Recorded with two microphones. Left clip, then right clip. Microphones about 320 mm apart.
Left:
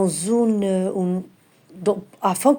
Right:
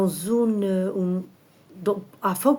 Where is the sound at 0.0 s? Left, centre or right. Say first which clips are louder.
Left 3 dB; centre.